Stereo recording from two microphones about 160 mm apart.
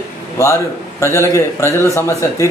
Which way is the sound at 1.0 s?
15° left (ahead or behind).